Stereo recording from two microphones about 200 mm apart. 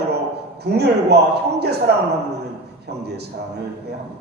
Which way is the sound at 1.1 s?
55° right (ahead or behind).